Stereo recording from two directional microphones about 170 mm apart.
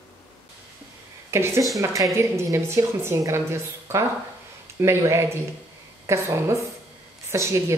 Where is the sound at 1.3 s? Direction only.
15° right (ahead or behind).